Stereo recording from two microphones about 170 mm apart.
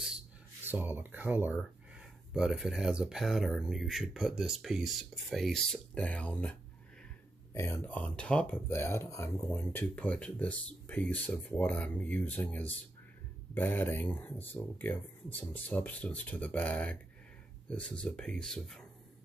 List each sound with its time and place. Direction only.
0.7 s speech: 10° right (ahead or behind); by 6.5 s 10° left (ahead or behind)
7.5 s speech: 15° left (ahead or behind)